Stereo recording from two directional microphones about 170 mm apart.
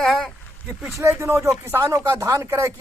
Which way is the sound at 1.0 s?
15° right (ahead or behind).